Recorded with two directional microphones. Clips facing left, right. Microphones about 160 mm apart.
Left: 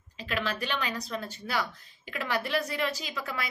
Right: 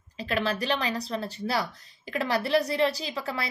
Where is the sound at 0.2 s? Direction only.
35° right (ahead or behind).